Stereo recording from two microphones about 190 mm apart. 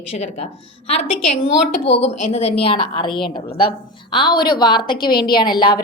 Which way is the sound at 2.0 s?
35° left (ahead or behind).